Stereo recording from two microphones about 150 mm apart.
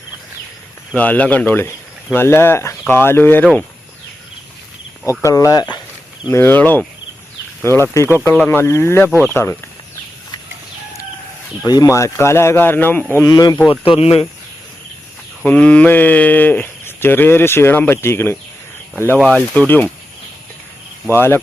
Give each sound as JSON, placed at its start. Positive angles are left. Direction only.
{"t": 0.9, "sound": "speech", "side_deg": 10}
{"t": 5.2, "sound": "speech", "side_deg": 20}
{"t": 6.2, "sound": "speech", "side_deg": 15}
{"t": 11.6, "sound": "speech", "side_deg": 25}
{"t": 13.3, "sound": "speech", "side_deg": 25}
{"t": 15.4, "sound": "speech", "side_deg": 10}
{"t": 21.1, "sound": "speech", "side_deg": 15}